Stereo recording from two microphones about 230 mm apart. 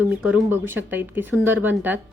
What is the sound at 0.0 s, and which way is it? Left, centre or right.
A woman's voice, centre.